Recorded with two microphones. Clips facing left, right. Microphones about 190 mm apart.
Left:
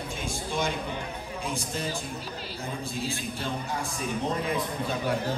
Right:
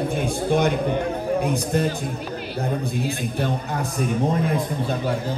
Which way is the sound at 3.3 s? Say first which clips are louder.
Right 7 dB; 60° right (ahead or behind).